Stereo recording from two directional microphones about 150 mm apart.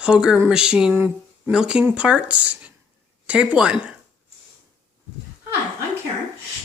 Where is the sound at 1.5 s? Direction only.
5° right (ahead or behind).